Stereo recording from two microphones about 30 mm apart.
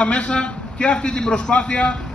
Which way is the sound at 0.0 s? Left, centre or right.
Left.